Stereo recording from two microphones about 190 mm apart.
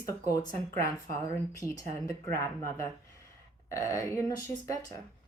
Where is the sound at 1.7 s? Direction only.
15° left (ahead or behind).